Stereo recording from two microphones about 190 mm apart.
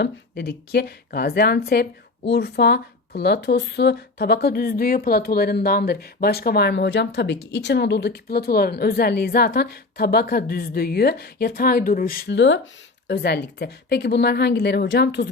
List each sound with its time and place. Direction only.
0.0 s a woman's voice: 55° left (ahead or behind)